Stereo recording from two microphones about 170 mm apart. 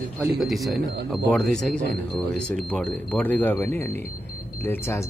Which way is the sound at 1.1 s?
5° left (ahead or behind).